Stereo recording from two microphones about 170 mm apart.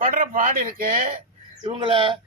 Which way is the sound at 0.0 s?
50° right (ahead or behind).